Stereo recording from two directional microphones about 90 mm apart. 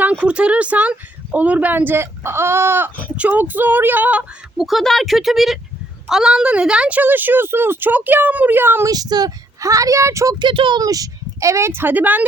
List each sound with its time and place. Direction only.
0.0 s a woman's voice: 15° right (ahead or behind)
4.5 s a woman's voice: centre (ahead or behind); by 8.9 s 25° right (ahead or behind)
8.9 s speech: 45° right (ahead or behind)
10.3 s speech: 65° right (ahead or behind)
10.8 s speech: 40° right (ahead or behind); by 12.2 s 20° right (ahead or behind)